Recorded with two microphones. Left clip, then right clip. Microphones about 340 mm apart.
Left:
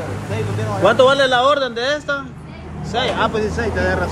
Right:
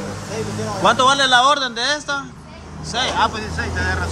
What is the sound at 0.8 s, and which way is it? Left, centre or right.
Speech, centre.